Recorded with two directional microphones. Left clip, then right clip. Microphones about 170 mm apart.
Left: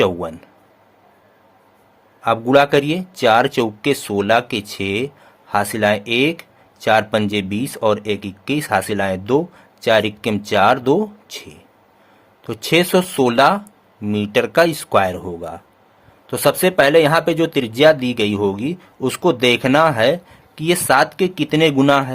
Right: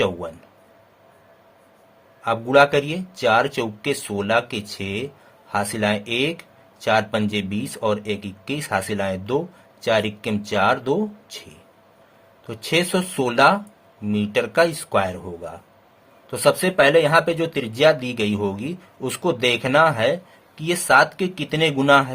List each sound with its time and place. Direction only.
0.0 s speech: 40° left (ahead or behind)
2.2 s speech: 40° left (ahead or behind)